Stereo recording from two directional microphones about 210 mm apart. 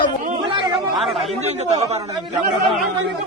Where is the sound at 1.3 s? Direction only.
30° right (ahead or behind).